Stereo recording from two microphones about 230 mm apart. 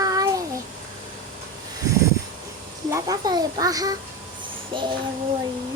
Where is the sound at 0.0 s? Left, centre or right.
Centre.